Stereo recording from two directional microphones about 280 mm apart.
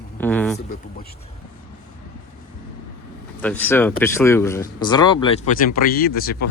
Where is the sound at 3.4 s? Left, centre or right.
Centre.